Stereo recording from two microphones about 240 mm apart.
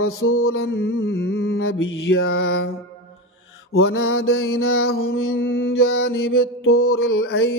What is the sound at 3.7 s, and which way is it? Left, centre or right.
Mantra, left.